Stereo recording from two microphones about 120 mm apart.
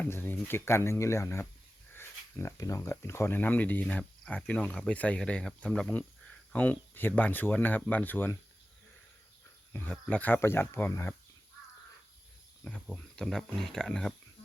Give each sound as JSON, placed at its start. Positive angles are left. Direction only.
{"t": 0.0, "sound": "speech", "side_deg": 15}
{"t": 9.7, "sound": "speech", "side_deg": 15}
{"t": 12.6, "sound": "speech", "side_deg": 5}